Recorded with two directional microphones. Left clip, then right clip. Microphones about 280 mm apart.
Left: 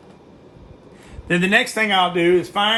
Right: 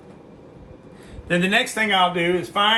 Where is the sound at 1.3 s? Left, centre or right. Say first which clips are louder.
Left 3 dB; left.